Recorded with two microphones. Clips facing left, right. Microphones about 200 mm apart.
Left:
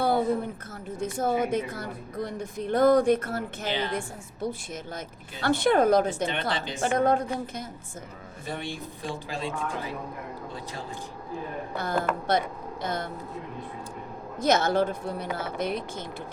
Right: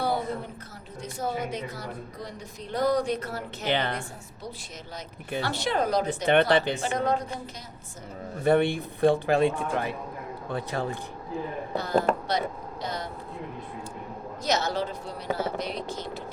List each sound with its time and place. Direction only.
0.9 s a woman's voice: 50° left (ahead or behind)
3.7 s speech: 60° right (ahead or behind)
5.4 s a woman's voice: 50° left (ahead or behind)
6.2 s speech: 60° right (ahead or behind)
6.8 s a woman's voice: 50° left (ahead or behind)
8.4 s speech: 60° right (ahead or behind)
11.8 s a woman's voice: 55° left (ahead or behind)
14.4 s a woman's voice: 55° left (ahead or behind)